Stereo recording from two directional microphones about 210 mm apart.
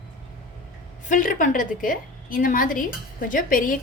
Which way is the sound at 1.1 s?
40° left (ahead or behind).